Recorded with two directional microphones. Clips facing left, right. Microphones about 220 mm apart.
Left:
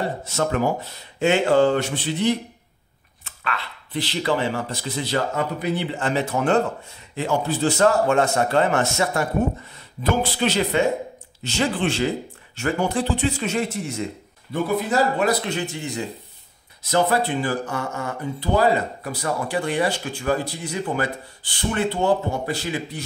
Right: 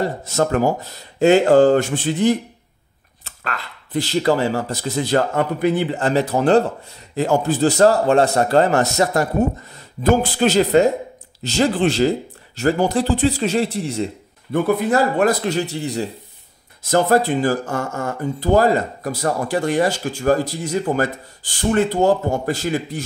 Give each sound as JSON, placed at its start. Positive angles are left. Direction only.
{"t": 0.0, "sound": "a man's voice", "side_deg": -40}
{"t": 14.5, "sound": "a man's voice", "side_deg": -55}
{"t": 16.8, "sound": "speech", "side_deg": -45}